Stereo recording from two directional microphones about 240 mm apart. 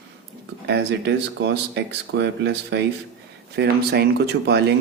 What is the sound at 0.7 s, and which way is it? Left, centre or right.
Speech, right.